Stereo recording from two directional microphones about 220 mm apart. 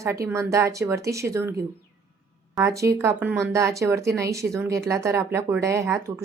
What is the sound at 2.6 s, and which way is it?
Speech, 15° right (ahead or behind).